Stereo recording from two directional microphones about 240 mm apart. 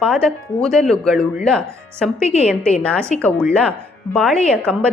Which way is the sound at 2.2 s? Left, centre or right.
Left.